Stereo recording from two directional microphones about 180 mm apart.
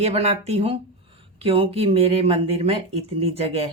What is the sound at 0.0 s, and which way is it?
Speech, 35° right (ahead or behind).